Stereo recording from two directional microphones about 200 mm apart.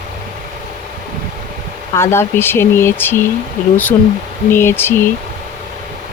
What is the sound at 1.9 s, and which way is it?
Speech, 15° left (ahead or behind).